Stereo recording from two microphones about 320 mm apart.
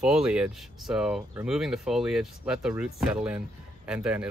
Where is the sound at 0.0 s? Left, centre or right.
Centre.